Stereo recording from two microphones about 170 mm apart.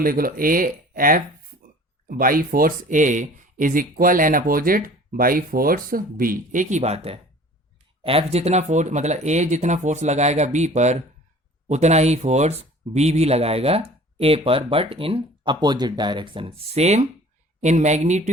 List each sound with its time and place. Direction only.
0.0 s speech: 60° right (ahead or behind); by 18.2 s 40° right (ahead or behind)